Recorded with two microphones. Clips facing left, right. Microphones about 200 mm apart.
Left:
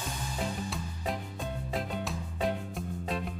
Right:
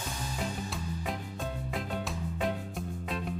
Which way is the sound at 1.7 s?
Centre (ahead or behind).